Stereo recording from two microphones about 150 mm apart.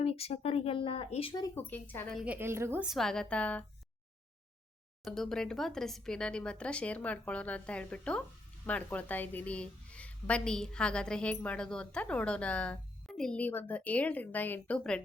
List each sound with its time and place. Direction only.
0.0 s speech: 40° left (ahead or behind)
1.5 s a woman's voice: 10° left (ahead or behind)
2.2 s a woman's voice: 10° right (ahead or behind)
2.8 s a woman's voice: centre (ahead or behind)
5.0 s a woman's voice: centre (ahead or behind)